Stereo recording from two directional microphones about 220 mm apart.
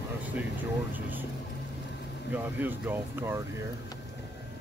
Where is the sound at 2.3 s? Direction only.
10° right (ahead or behind).